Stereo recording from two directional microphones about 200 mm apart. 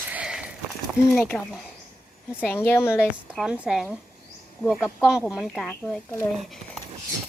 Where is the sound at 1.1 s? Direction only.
5° left (ahead or behind).